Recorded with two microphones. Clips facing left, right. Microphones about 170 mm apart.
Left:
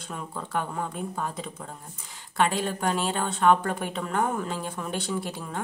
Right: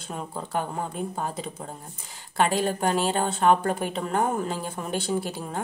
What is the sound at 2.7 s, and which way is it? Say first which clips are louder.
A woman's voice: right 3 dB; 35° right (ahead or behind).